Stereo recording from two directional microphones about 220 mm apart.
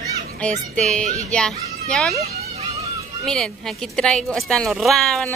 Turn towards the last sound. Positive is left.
turn(degrees=0)  # may be behind; listen again after turning